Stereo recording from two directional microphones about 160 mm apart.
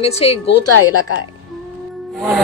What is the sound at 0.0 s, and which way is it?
Speech, 40° left (ahead or behind).